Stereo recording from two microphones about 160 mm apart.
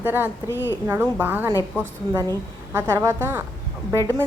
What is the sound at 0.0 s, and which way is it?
Speech, 15° right (ahead or behind).